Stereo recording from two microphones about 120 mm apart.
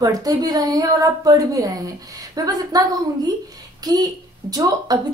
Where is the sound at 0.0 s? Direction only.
30° right (ahead or behind).